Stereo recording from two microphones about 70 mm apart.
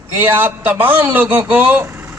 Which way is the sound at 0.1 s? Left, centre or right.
Right.